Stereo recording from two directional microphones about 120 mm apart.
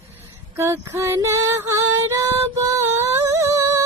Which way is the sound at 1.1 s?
25° right (ahead or behind).